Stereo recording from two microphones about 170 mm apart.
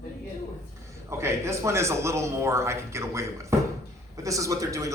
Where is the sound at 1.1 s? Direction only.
15° right (ahead or behind).